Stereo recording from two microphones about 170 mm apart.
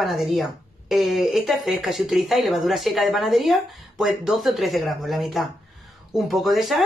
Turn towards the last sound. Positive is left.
turn(degrees=0)  # may be behind; listen again after turning